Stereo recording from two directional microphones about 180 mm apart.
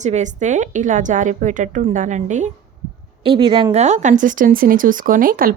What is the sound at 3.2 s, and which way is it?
A woman's voice, 30° right (ahead or behind).